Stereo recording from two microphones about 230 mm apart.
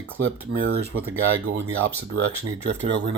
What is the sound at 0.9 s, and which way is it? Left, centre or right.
Speech, right.